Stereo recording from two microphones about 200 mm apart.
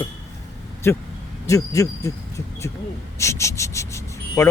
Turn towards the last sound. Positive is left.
turn(degrees=15)  # may be behind; listen again after turning